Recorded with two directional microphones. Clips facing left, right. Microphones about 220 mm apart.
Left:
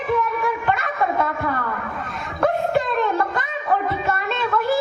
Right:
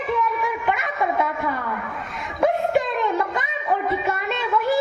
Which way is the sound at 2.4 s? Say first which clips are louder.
Even; 15° right (ahead or behind).